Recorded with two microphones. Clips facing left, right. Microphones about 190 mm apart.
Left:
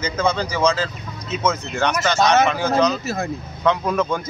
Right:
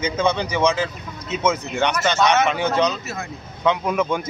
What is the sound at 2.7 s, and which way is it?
Speech, 35° left (ahead or behind).